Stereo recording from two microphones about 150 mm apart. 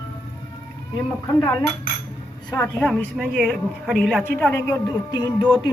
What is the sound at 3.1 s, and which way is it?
A man's voice, centre (ahead or behind).